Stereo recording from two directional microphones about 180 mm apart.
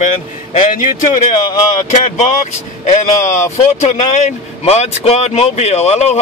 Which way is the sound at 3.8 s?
40° left (ahead or behind).